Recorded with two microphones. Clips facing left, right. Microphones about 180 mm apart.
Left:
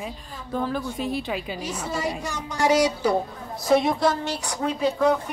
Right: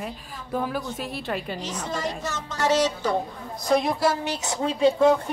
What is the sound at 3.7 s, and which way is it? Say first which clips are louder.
Speech: left 2 dB; centre (ahead or behind).